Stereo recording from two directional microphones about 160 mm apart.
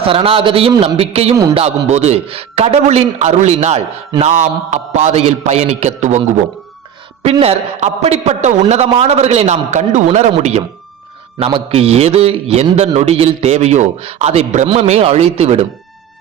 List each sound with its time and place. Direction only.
0.0 s a man's voice: 35° right (ahead or behind)
7.2 s a man's voice: 40° right (ahead or behind)
11.3 s a man's voice: 35° right (ahead or behind)